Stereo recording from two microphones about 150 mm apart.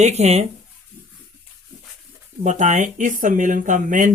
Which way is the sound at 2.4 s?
55° right (ahead or behind).